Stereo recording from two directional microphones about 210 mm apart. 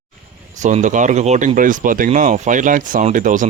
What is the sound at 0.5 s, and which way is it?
Speech, 35° right (ahead or behind).